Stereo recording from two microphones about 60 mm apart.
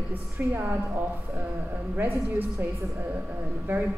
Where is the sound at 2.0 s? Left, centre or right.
Right.